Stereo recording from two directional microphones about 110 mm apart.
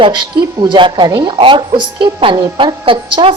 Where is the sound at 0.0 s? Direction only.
45° right (ahead or behind).